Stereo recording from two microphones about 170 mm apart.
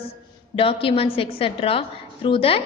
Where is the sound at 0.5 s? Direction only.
30° left (ahead or behind).